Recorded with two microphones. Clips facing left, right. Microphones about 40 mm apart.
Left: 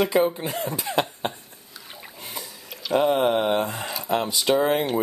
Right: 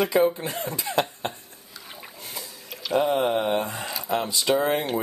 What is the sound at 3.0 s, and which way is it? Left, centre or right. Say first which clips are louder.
Speech: left 2 dB; centre.